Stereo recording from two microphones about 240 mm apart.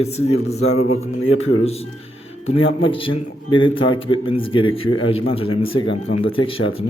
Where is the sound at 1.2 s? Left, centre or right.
Left.